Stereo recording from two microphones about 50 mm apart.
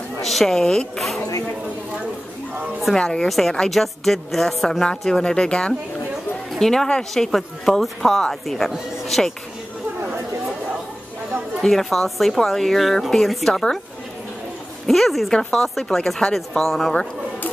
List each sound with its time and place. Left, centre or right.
0.2 s speech: centre
0.9 s speech: centre
3.0 s speech: centre
3.3 s a woman's voice: centre
11.6 s a woman's voice: centre
14.9 s a woman's voice: centre